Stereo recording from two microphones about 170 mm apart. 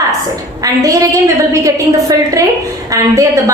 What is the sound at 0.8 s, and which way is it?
A woman's voice, 20° right (ahead or behind).